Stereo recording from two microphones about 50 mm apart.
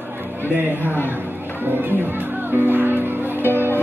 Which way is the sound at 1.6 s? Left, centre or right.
Right.